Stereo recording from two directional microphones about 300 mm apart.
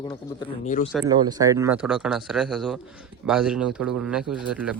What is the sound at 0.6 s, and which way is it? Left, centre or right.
Speech, left.